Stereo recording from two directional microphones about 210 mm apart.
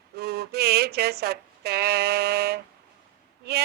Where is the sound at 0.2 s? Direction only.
50° right (ahead or behind).